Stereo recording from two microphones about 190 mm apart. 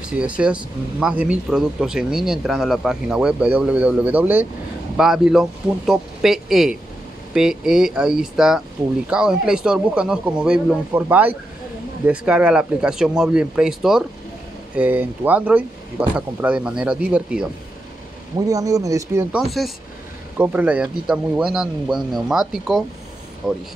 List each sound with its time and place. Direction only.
0.2 s speech: 5° right (ahead or behind)
18.5 s speech: 20° right (ahead or behind)
19.6 s speech: centre (ahead or behind)
20.3 s speech: 10° right (ahead or behind)